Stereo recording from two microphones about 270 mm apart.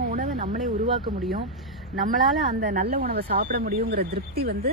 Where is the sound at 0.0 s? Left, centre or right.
Right.